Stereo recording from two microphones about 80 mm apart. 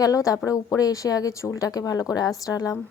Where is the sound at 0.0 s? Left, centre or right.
Left.